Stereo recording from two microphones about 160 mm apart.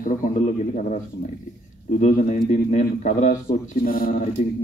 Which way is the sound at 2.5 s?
45° left (ahead or behind).